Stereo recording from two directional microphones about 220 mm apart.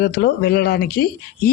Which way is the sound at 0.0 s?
45° left (ahead or behind).